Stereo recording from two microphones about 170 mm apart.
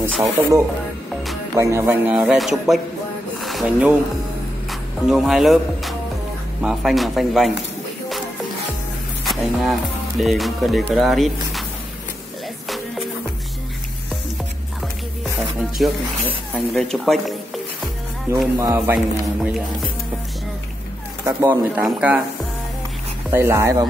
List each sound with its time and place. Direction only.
0.2 s speech: 15° right (ahead or behind)
3.3 s a sound: centre (ahead or behind)
4.6 s speech: centre (ahead or behind)
9.2 s speech: centre (ahead or behind)
12.6 s music: centre (ahead or behind)
15.8 s speech: 5° right (ahead or behind)
18.3 s speech: 15° right (ahead or behind)
19.4 s speech: centre (ahead or behind)
21.3 s speech: 10° right (ahead or behind)
23.3 s speech: 15° right (ahead or behind)